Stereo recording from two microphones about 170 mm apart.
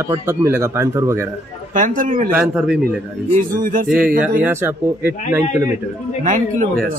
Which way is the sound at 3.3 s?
50° right (ahead or behind).